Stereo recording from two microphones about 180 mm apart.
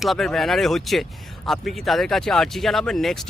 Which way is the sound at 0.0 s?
Centre (ahead or behind).